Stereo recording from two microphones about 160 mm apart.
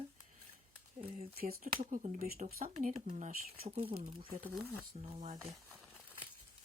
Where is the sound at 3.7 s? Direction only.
35° right (ahead or behind).